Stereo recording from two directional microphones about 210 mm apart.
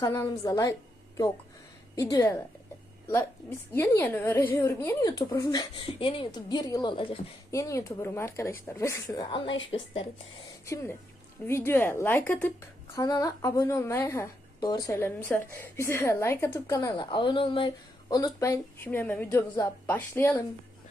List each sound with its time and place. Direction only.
0.0 s a woman's voice: 15° left (ahead or behind)
3.8 s speech: 10° left (ahead or behind)
11.4 s speech: 10° left (ahead or behind)